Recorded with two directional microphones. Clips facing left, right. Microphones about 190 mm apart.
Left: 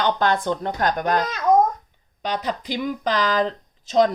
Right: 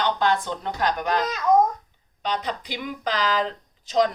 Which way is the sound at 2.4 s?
45° left (ahead or behind).